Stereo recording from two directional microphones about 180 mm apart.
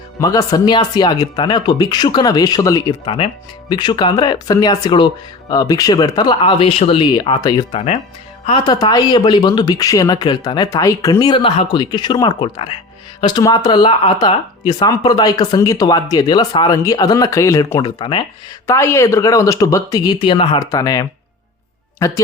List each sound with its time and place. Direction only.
0.2 s speech: 20° left (ahead or behind)